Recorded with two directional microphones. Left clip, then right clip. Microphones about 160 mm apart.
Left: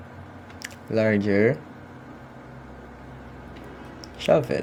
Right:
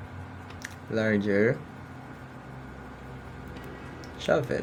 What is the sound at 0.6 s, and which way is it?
Speech, 30° left (ahead or behind).